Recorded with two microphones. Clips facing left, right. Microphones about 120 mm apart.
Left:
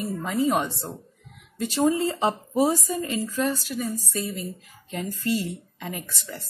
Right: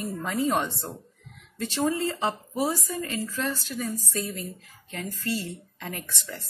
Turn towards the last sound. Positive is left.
turn(degrees=5)  # may be behind; listen again after turning